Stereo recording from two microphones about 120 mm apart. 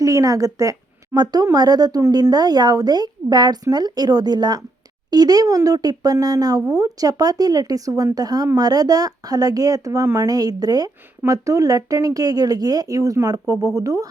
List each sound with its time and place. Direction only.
0.0 s a woman's voice: 30° right (ahead or behind)